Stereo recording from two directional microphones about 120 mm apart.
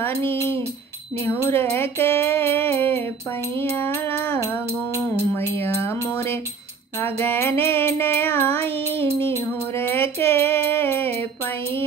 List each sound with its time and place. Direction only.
0.0 s speech: 15° left (ahead or behind)
1.2 s music: 20° left (ahead or behind)